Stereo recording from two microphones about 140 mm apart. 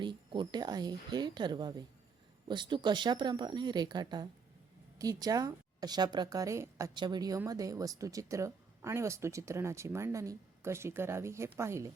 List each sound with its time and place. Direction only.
0.0 s speech: 35° right (ahead or behind)
6.9 s speech: 30° right (ahead or behind)